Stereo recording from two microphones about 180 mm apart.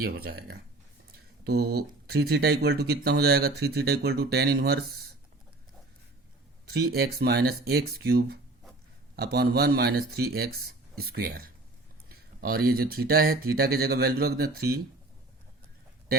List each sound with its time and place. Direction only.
0.0 s speech: 55° right (ahead or behind)
6.7 s speech: 60° right (ahead or behind)